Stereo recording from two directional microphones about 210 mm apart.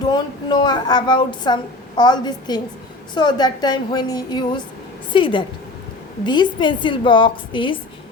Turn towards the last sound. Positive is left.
turn(degrees=25)  # may be behind; listen again after turning